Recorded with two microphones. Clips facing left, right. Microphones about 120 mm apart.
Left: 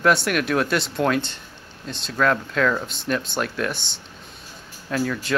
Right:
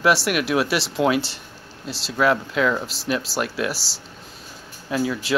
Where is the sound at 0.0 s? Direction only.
5° right (ahead or behind).